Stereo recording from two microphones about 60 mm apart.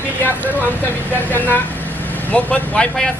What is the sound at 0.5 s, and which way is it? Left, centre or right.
Speech, left.